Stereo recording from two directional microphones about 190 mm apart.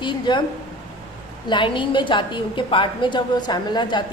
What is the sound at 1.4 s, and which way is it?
A woman's voice, 25° left (ahead or behind).